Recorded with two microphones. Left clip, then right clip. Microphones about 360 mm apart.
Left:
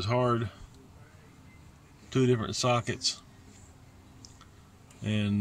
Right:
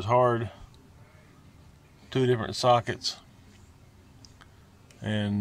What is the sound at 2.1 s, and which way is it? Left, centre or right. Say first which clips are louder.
Speech: right 1 dB; right.